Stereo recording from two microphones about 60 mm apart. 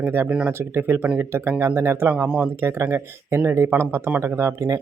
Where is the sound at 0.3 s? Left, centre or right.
Centre.